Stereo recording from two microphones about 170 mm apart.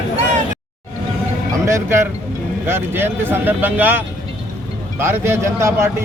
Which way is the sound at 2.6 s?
15° right (ahead or behind).